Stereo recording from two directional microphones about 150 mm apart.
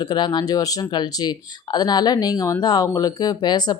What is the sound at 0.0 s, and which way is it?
Speech, 30° left (ahead or behind).